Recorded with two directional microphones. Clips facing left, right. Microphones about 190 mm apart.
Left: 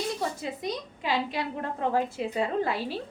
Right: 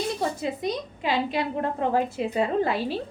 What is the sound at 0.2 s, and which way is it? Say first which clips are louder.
A woman's voice: right 4 dB; 25° right (ahead or behind).